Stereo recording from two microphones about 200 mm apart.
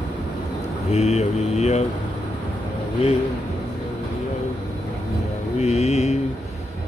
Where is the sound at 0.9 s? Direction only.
30° left (ahead or behind).